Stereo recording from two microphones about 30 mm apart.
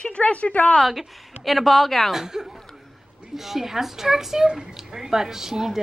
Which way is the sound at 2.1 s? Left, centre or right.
Centre.